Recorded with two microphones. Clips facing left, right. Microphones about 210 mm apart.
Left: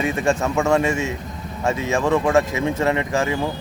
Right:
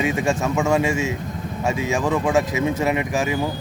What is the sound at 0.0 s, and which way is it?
Speech, 15° right (ahead or behind).